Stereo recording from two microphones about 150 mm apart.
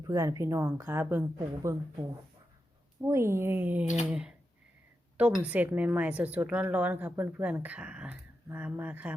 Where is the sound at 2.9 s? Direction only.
20° right (ahead or behind).